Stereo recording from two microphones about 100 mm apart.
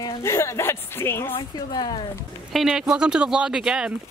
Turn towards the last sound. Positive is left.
turn(degrees=-5)  # may be behind; listen again after turning